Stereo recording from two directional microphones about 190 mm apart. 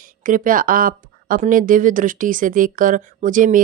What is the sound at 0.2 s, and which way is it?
A woman's voice, 45° right (ahead or behind).